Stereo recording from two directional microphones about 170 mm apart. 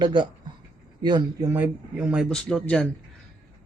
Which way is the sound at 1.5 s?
10° right (ahead or behind).